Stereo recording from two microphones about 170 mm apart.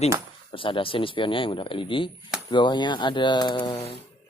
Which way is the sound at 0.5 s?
30° left (ahead or behind).